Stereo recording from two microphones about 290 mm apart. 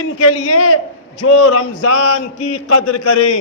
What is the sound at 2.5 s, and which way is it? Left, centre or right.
Speech, left.